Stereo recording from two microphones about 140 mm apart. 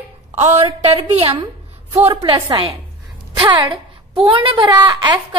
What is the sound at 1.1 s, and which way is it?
A woman's voice, 45° right (ahead or behind).